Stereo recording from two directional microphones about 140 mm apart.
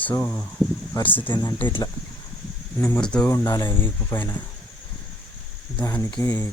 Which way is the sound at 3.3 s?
25° left (ahead or behind).